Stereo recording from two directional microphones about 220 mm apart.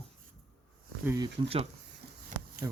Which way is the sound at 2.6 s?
15° right (ahead or behind).